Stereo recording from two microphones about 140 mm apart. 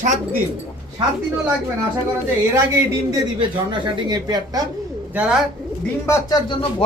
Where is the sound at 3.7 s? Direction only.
35° right (ahead or behind).